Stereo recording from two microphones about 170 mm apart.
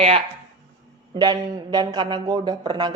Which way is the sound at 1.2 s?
25° right (ahead or behind).